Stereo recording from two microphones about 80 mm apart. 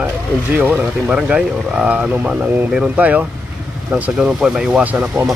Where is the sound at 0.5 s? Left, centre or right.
Right.